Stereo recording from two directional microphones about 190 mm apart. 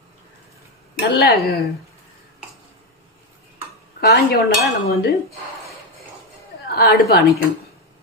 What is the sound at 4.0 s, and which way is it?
Speech, 55° left (ahead or behind).